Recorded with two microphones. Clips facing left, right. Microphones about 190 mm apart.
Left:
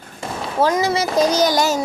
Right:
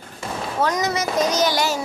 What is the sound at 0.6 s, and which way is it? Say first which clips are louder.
A child's voice: left 5 dB; 30° left (ahead or behind).